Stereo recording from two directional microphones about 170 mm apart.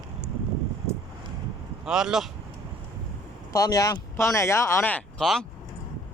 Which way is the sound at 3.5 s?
20° left (ahead or behind).